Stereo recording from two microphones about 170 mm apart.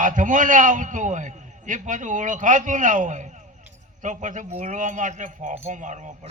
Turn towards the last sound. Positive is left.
turn(degrees=-45)  # may be behind; listen again after turning